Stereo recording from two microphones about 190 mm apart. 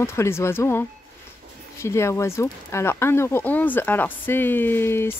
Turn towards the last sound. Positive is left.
turn(degrees=10)  # may be behind; listen again after turning